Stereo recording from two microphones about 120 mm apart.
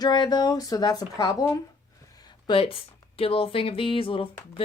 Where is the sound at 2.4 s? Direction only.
50° left (ahead or behind).